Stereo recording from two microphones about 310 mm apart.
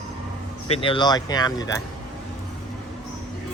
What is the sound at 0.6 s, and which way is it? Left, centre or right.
Speech, centre.